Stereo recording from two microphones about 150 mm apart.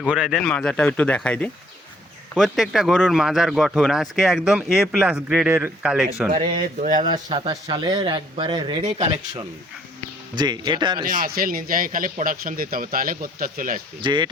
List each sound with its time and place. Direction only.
0.0 s speech: centre (ahead or behind)
6.3 s speech: 30° right (ahead or behind)
8.8 s speech: 45° right (ahead or behind)
10.3 s speech: 30° right (ahead or behind)
11.0 s a man's voice: 70° right (ahead or behind)
14.0 s speech: 30° right (ahead or behind)